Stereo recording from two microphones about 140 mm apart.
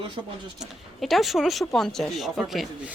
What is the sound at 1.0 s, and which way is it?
Speech, centre (ahead or behind).